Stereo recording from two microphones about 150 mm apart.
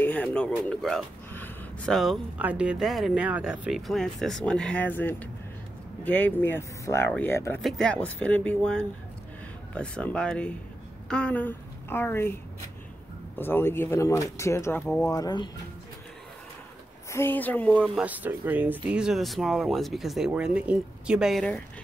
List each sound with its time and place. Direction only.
0.0 s speech: 10° left (ahead or behind)
7.6 s a woman's voice: centre (ahead or behind)
13.4 s speech: 15° left (ahead or behind)
15.0 s speech: 25° left (ahead or behind)
17.1 s speech: 15° left (ahead or behind)
18.0 s speech: 10° right (ahead or behind)